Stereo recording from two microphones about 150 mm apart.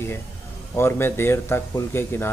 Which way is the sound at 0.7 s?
15° left (ahead or behind).